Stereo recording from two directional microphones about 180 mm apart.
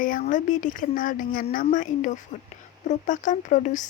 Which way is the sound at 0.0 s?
45° left (ahead or behind).